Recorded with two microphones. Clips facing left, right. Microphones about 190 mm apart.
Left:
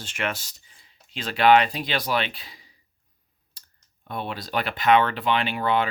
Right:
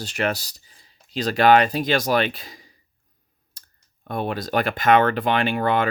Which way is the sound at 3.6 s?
45° right (ahead or behind).